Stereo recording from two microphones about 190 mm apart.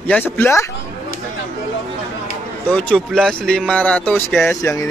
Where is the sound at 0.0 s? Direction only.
10° left (ahead or behind).